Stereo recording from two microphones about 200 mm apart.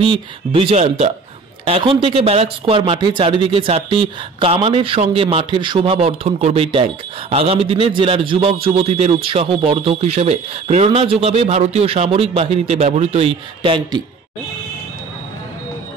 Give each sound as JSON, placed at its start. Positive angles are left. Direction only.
{"t": 0.0, "sound": "speech", "side_deg": -25}